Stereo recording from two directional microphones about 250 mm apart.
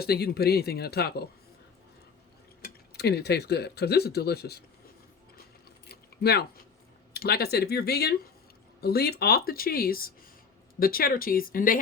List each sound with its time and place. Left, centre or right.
0.0 s speech: left
2.9 s speech: left
7.1 s speech: left